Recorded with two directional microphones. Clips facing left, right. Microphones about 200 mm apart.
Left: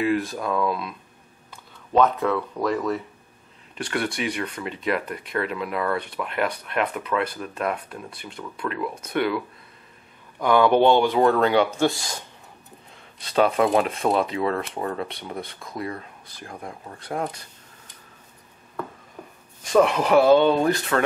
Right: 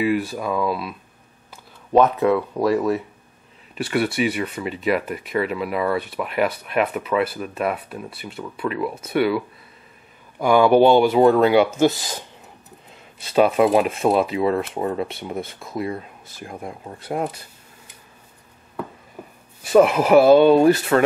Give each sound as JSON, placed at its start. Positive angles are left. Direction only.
{"t": 0.0, "sound": "speech", "side_deg": -10}
{"t": 2.0, "sound": "speech", "side_deg": -10}
{"t": 10.4, "sound": "speech", "side_deg": -10}
{"t": 13.2, "sound": "speech", "side_deg": -10}
{"t": 15.0, "sound": "speech", "side_deg": -5}
{"t": 16.4, "sound": "speech", "side_deg": -15}
{"t": 19.2, "sound": "a sound", "side_deg": -5}
{"t": 19.6, "sound": "speech", "side_deg": -5}
{"t": 20.9, "sound": "speech", "side_deg": -25}